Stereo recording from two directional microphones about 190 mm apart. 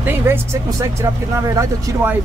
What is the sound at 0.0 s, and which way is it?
Speech, 10° right (ahead or behind).